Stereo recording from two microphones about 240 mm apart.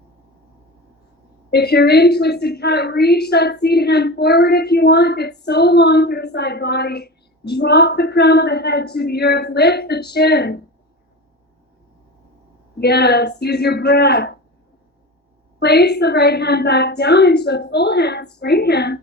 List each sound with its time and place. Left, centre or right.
1.5 s a woman's voice: left
12.8 s a woman's voice: left
15.5 s a woman's voice: left